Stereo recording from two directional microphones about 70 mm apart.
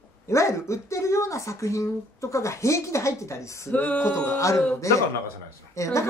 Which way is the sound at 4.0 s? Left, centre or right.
Left.